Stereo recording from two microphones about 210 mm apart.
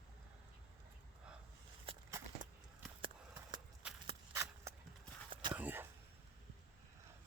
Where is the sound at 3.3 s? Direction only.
10° right (ahead or behind).